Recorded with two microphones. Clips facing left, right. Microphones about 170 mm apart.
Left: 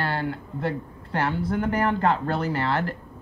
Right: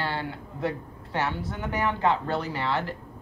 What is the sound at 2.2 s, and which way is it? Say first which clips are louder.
Speech: left 3 dB; 55° left (ahead or behind).